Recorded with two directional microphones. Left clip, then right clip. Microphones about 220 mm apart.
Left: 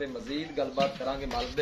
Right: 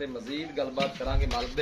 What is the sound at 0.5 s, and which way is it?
Speech, 25° right (ahead or behind).